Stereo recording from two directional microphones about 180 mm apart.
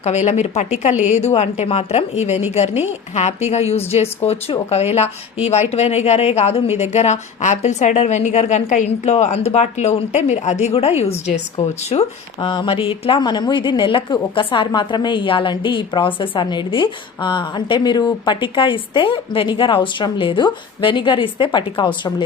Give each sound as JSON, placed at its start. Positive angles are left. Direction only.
{"t": 0.0, "sound": "a woman's voice", "side_deg": 40}